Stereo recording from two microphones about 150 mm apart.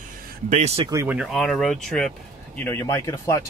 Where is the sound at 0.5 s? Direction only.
45° right (ahead or behind).